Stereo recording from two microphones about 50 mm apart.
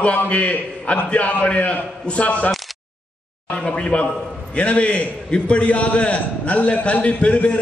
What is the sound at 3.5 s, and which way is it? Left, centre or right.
A man's voice, left.